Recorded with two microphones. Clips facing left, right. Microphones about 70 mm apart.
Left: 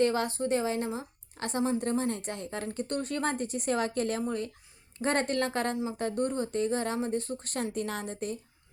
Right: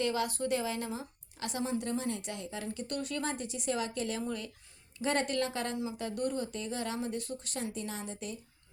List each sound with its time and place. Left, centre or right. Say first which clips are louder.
0.0 s speech: left 5 dB; left